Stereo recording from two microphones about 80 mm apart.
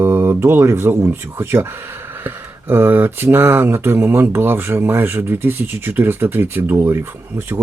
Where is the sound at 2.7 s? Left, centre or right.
Right.